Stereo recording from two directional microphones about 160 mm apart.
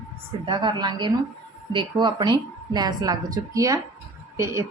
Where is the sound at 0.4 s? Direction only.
30° right (ahead or behind).